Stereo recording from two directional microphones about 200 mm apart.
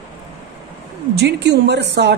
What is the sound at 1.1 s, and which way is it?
A woman's voice, 55° right (ahead or behind).